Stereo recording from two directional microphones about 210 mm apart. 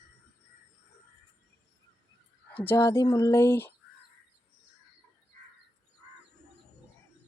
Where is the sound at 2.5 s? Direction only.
10° left (ahead or behind).